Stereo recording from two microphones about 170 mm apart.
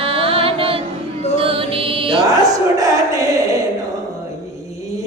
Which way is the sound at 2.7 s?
20° right (ahead or behind).